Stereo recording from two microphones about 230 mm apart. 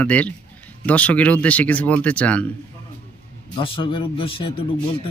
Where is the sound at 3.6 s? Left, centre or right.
Left.